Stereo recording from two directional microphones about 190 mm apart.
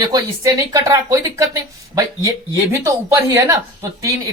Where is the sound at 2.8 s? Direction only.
15° right (ahead or behind).